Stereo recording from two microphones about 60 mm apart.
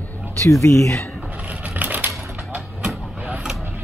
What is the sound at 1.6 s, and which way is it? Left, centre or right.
Typewriter, right.